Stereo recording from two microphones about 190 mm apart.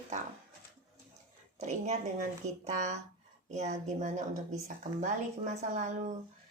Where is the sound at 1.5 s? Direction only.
35° right (ahead or behind).